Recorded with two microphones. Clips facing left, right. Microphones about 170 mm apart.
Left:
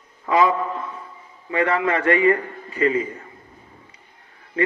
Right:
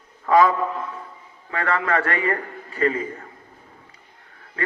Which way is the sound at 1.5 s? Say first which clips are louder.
Left 3 dB; 20° left (ahead or behind).